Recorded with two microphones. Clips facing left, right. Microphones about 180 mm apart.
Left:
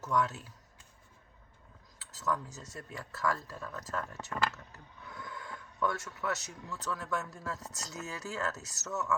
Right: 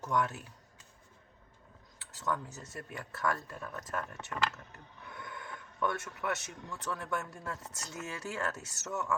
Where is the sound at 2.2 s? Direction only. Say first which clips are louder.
Left 1 dB; 25° right (ahead or behind).